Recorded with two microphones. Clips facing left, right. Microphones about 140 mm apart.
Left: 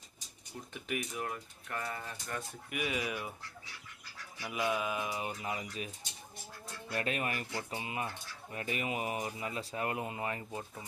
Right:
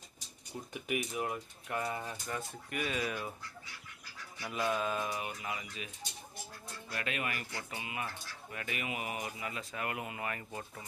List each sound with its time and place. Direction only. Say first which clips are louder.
0.7 s speech: right 2 dB; 10° right (ahead or behind)
2.2 s speech: right 1 dB; centre (ahead or behind)
4.4 s speech: even; 5° left (ahead or behind)
5.2 s speech: left 2 dB; 30° left (ahead or behind)
6.9 s speech: left 3 dB; 35° left (ahead or behind); by 10.8 s 15° left (ahead or behind)